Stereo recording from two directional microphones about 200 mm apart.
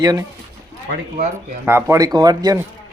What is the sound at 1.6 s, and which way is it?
Speech, 15° right (ahead or behind).